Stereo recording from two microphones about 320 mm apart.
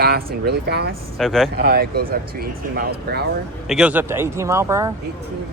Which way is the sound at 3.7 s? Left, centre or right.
Centre.